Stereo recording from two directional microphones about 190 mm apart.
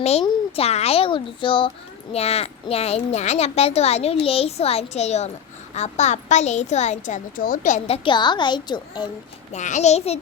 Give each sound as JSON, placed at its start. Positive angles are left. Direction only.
{"t": 0.0, "sound": "a woman's voice", "side_deg": 30}
{"t": 9.5, "sound": "a woman's voice", "side_deg": 40}